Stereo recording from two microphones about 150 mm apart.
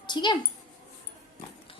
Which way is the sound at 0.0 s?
30° left (ahead or behind).